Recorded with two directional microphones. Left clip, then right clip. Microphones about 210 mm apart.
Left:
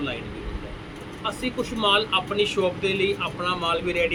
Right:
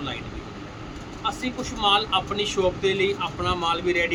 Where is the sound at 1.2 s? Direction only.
30° right (ahead or behind).